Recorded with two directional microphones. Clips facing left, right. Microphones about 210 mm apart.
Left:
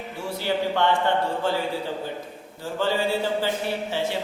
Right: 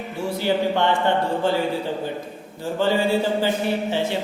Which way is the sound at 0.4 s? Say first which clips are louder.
Right 3 dB; 15° right (ahead or behind).